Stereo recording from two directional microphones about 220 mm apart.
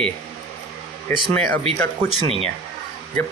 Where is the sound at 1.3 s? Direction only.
5° left (ahead or behind).